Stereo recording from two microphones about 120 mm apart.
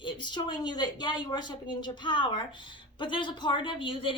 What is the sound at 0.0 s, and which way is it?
A woman's voice, 40° left (ahead or behind).